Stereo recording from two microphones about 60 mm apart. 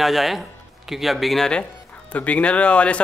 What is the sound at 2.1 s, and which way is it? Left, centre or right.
Speech, left.